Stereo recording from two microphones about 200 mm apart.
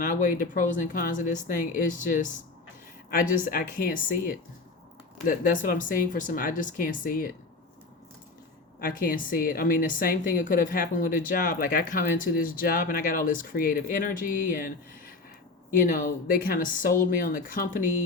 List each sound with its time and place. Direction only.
0.0 s a woman's voice: 40° left (ahead or behind)
8.8 s a woman's voice: 45° left (ahead or behind)